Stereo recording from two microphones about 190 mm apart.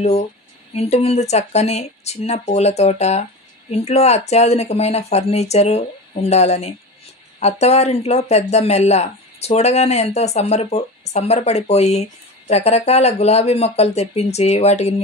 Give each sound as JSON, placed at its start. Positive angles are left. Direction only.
{"t": 0.0, "sound": "speech", "side_deg": 35}